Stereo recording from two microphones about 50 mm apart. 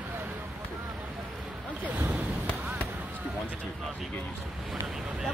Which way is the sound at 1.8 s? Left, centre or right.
Right.